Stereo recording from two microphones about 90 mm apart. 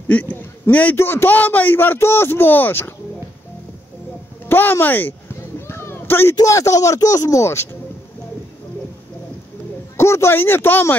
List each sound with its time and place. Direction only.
0.1 s a man's voice: 20° left (ahead or behind)
4.5 s a man's voice: 25° left (ahead or behind)
5.7 s a sound: 25° left (ahead or behind)
6.3 s speech: 35° left (ahead or behind)
9.9 s a man's voice: 30° left (ahead or behind)